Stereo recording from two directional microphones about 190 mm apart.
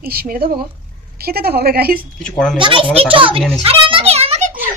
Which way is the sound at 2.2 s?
5° left (ahead or behind).